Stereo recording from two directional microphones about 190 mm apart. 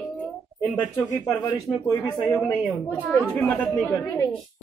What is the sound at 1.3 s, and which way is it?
Speech, 15° left (ahead or behind).